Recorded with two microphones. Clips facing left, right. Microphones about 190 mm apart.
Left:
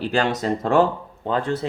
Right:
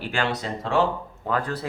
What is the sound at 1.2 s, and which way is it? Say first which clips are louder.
Speech: left 4 dB; 25° left (ahead or behind).